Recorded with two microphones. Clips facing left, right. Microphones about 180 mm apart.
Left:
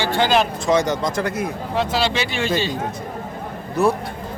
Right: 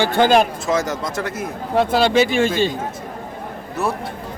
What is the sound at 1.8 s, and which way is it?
Speech, 50° right (ahead or behind).